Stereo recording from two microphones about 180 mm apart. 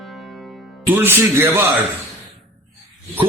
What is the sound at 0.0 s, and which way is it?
Music, centre (ahead or behind).